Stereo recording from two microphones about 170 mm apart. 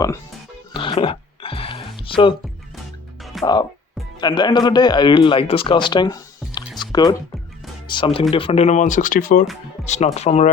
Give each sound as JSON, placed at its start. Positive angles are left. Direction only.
{"t": 0.7, "sound": "music", "side_deg": 30}
{"t": 3.4, "sound": "a man's voice", "side_deg": 25}
{"t": 6.7, "sound": "music", "side_deg": 25}
{"t": 7.9, "sound": "a man's voice", "side_deg": 30}
{"t": 9.8, "sound": "speech", "side_deg": 40}